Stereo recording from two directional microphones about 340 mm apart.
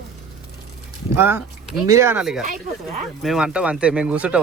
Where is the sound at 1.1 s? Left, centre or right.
Centre.